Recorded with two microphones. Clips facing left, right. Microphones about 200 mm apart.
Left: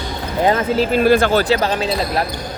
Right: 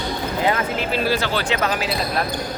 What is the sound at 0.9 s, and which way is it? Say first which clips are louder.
Speech: left 9 dB; 50° left (ahead or behind).